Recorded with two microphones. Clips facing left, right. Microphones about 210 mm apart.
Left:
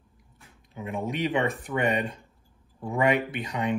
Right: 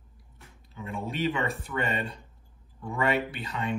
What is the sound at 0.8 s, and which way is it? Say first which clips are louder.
Speech: left 1 dB; 15° left (ahead or behind).